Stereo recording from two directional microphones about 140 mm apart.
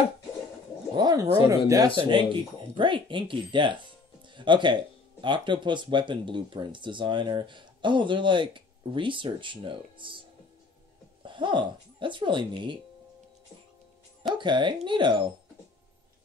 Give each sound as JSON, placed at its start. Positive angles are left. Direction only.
{"t": 0.9, "sound": "speech", "side_deg": -25}
{"t": 2.0, "sound": "speech", "side_deg": -35}
{"t": 11.2, "sound": "speech", "side_deg": -35}
{"t": 14.3, "sound": "speech", "side_deg": -35}